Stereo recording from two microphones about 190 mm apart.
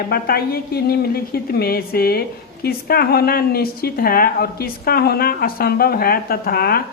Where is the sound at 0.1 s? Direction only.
50° left (ahead or behind).